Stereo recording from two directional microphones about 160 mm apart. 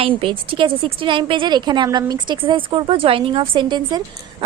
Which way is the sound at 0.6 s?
30° right (ahead or behind).